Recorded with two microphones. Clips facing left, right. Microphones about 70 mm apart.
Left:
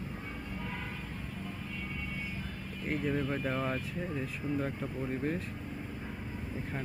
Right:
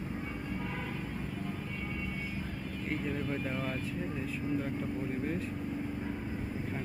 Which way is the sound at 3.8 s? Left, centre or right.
Centre.